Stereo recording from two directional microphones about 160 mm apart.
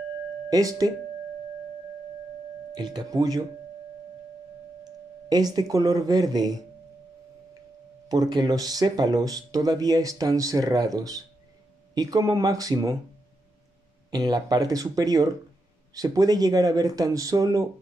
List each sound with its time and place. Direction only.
0.5 s speech: 20° right (ahead or behind)
2.7 s speech: 25° right (ahead or behind)
5.3 s speech: 25° right (ahead or behind)
8.1 s speech: 25° right (ahead or behind)
14.1 s speech: 25° right (ahead or behind)